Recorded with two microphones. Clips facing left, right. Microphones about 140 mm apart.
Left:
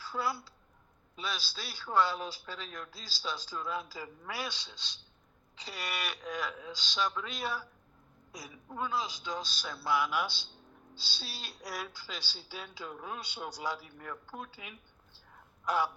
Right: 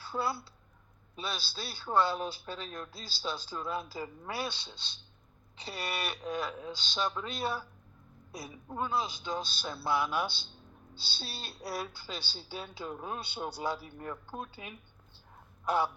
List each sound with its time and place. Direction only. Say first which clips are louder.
0.0 s speech: right 1 dB; 25° right (ahead or behind)
11.5 s speech: right 4 dB; 30° right (ahead or behind)
15.6 s crow: right 1 dB; 25° right (ahead or behind)